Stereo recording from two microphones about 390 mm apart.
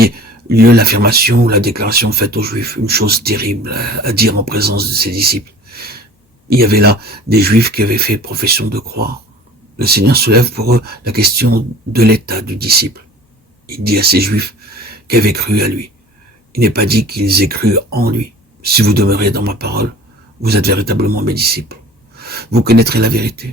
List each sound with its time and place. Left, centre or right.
0.0 s speech: right